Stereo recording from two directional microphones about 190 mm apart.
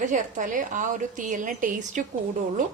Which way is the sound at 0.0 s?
40° right (ahead or behind).